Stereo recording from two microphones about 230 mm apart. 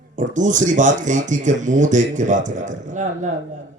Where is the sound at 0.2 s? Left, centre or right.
Right.